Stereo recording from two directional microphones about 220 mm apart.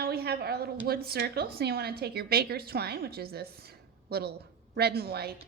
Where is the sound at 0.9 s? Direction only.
45° right (ahead or behind).